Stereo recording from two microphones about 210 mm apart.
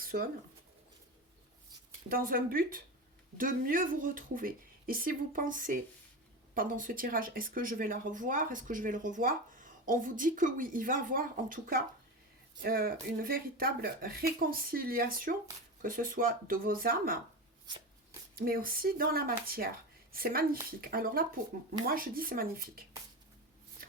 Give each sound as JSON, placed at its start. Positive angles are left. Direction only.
{"t": 0.0, "sound": "a sound", "side_deg": -45}
{"t": 2.0, "sound": "speech", "side_deg": -45}
{"t": 17.7, "sound": "shuffling cards", "side_deg": -20}
{"t": 18.3, "sound": "speech", "side_deg": -45}